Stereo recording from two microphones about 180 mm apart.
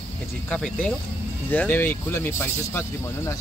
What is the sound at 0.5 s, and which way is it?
Speech, 5° left (ahead or behind).